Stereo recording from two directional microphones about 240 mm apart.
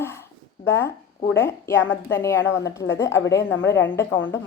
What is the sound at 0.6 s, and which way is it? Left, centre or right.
A woman's voice, centre.